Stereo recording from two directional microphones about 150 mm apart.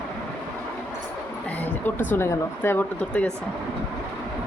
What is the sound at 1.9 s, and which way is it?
Speech, 15° left (ahead or behind).